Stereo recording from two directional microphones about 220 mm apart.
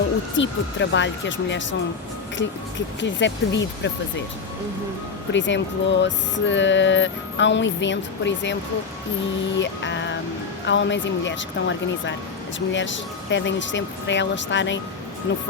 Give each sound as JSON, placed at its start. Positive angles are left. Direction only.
{"t": 0.3, "sound": "speech", "side_deg": 55}
{"t": 5.3, "sound": "speech", "side_deg": 55}
{"t": 9.6, "sound": "speech", "side_deg": 55}